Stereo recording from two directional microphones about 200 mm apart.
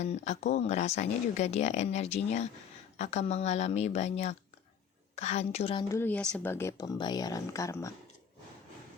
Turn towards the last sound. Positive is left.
turn(degrees=15)  # may be behind; listen again after turning